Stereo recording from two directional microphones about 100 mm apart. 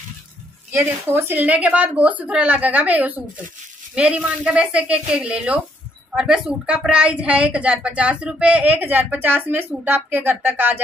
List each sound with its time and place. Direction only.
0.7 s speech: 20° right (ahead or behind)